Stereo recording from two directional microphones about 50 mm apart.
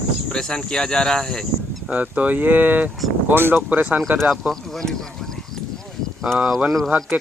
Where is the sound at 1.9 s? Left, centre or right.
Right.